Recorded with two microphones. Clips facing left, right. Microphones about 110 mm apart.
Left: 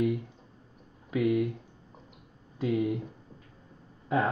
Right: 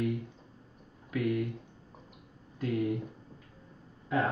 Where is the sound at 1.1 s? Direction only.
5° left (ahead or behind).